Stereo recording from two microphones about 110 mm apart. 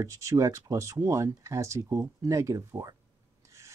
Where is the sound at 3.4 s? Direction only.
25° right (ahead or behind).